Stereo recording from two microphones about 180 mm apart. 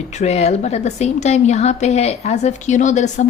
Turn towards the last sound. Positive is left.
turn(degrees=40)  # may be behind; listen again after turning